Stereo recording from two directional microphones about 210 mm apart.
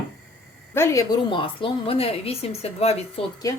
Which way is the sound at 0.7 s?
15° left (ahead or behind).